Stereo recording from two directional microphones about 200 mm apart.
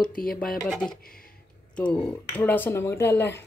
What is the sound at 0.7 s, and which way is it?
Speech, 5° left (ahead or behind).